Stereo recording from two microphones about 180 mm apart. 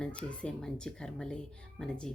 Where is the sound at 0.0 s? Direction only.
5° left (ahead or behind).